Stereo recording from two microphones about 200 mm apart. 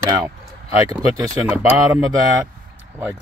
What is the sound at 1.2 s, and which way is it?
Speech, 15° right (ahead or behind).